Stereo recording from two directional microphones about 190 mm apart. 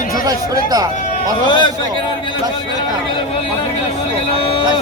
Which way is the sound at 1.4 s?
25° left (ahead or behind).